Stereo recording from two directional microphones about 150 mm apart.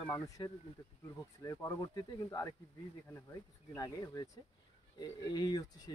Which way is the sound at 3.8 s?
25° left (ahead or behind).